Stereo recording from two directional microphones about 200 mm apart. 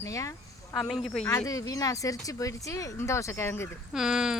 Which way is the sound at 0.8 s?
5° left (ahead or behind).